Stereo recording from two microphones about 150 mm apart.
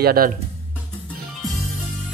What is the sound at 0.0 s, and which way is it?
Speech, 90° right.